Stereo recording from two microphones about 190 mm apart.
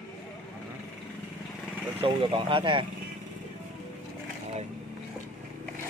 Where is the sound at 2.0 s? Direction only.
25° right (ahead or behind).